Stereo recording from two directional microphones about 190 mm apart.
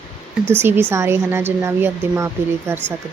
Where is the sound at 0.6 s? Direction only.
10° right (ahead or behind).